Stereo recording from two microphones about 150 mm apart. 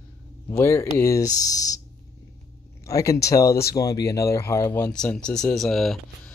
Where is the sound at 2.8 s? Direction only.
20° left (ahead or behind).